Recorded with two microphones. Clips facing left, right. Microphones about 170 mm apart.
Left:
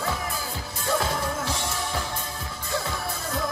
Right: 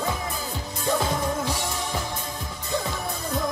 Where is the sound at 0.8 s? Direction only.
15° right (ahead or behind).